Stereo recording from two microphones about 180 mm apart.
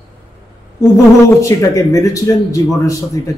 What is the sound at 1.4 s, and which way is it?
Speech, 15° left (ahead or behind).